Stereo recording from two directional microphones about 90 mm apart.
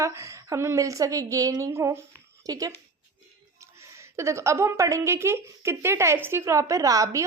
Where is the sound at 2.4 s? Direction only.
40° right (ahead or behind).